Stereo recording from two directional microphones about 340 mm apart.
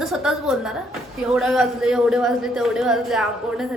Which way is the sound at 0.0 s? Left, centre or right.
Centre.